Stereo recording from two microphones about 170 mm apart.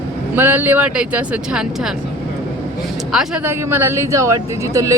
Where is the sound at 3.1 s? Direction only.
5° right (ahead or behind).